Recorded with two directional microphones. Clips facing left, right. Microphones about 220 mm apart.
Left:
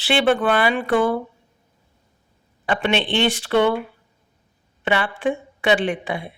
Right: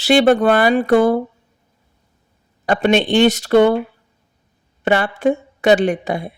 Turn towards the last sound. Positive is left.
turn(degrees=-40)  # may be behind; listen again after turning